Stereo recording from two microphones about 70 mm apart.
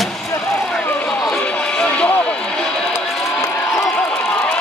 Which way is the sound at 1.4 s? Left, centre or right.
Centre.